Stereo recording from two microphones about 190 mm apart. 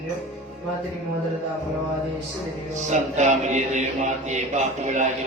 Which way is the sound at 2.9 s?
40° right (ahead or behind).